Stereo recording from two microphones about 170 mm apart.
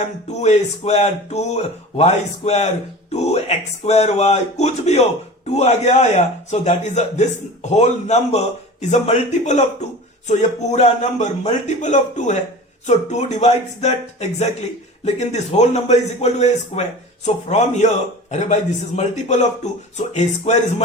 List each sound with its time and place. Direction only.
0.0 s a man's voice: 40° left (ahead or behind)